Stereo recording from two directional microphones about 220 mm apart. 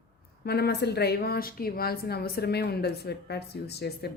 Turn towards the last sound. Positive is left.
turn(degrees=45)  # may be behind; listen again after turning